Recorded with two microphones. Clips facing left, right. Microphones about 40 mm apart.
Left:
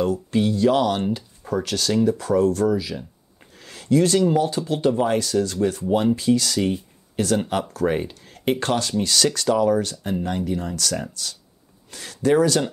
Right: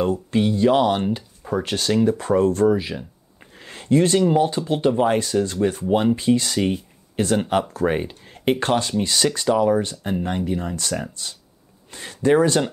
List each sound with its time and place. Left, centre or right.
0.3 s speech: right
1.5 s speech: right
10.8 s speech: right